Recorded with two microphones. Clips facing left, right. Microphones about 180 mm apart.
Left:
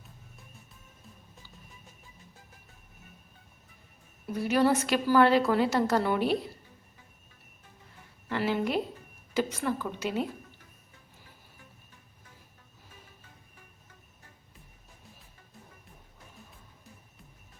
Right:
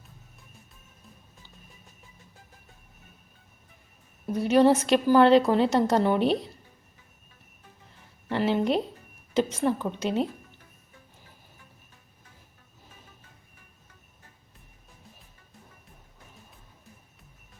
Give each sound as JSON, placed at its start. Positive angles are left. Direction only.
{"t": 4.4, "sound": "a woman's voice", "side_deg": -25}
{"t": 8.3, "sound": "a sound", "side_deg": -25}
{"t": 9.3, "sound": "a woman's voice", "side_deg": -25}